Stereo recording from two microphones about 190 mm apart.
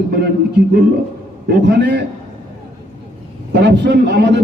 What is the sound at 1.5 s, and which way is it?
Speech, 65° right (ahead or behind).